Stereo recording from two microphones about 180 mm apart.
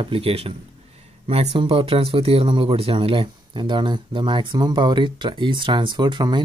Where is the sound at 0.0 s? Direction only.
30° right (ahead or behind).